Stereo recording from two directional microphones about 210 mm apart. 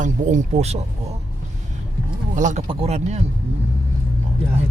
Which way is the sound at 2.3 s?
35° right (ahead or behind).